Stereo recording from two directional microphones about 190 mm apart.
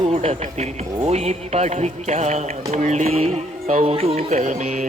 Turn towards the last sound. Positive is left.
turn(degrees=-40)  # may be behind; listen again after turning